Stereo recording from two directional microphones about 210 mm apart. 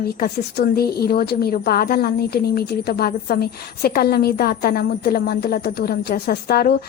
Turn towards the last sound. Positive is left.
turn(degrees=45)  # may be behind; listen again after turning